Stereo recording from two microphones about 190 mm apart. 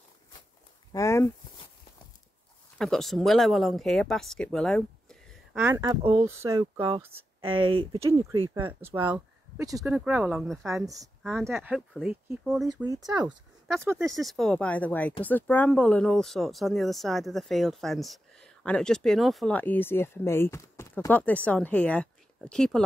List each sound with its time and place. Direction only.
0.9 s speech: 15° left (ahead or behind)
2.8 s speech: centre (ahead or behind)
5.3 s a sound: 5° right (ahead or behind)
5.8 s speech: 25° right (ahead or behind)
6.2 s speech: 15° right (ahead or behind)
6.6 s speech: 25° right (ahead or behind)
8.0 s speech: 15° right (ahead or behind)
9.9 s speech: 5° right (ahead or behind)
10.7 s a woman's voice: 15° right (ahead or behind); by 12.8 s centre (ahead or behind)
12.8 s speech: 20° right (ahead or behind)
14.2 s a woman's voice: centre (ahead or behind)